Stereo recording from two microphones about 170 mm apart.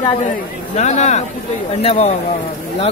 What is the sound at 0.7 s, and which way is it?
Speech, 45° left (ahead or behind).